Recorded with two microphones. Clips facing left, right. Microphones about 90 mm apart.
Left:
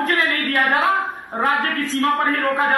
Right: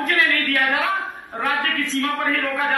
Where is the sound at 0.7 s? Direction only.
35° left (ahead or behind).